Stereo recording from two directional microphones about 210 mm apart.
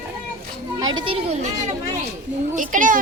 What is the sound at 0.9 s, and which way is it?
A child's voice, 25° right (ahead or behind).